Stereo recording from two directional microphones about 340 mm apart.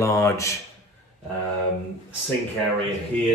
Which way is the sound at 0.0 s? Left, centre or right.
Centre.